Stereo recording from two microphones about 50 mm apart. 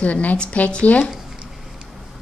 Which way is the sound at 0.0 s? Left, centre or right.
Left.